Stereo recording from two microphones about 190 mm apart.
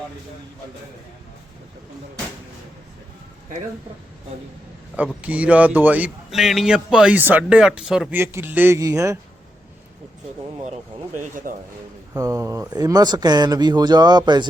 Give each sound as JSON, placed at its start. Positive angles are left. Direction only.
{"t": 5.2, "sound": "a man's voice", "side_deg": -5}
{"t": 10.6, "sound": "speech", "side_deg": -40}
{"t": 12.1, "sound": "speech", "side_deg": -20}